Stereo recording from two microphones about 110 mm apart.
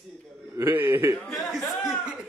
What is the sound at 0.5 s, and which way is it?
Speech, 20° right (ahead or behind).